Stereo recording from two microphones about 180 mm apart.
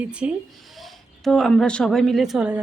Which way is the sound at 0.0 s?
5° right (ahead or behind).